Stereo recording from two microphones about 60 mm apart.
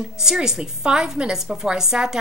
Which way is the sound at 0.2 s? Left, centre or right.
Centre.